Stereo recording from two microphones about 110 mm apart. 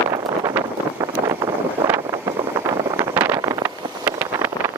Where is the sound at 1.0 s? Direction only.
35° right (ahead or behind).